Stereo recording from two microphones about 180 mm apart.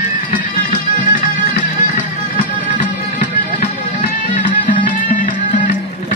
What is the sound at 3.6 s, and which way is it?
Music, 35° left (ahead or behind).